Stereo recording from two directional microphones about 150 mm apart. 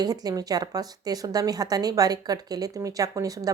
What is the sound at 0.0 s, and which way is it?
A woman's voice, 25° right (ahead or behind).